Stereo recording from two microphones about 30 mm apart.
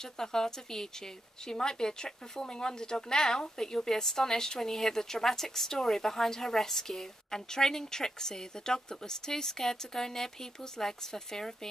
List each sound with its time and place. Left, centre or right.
0.0 s speech: centre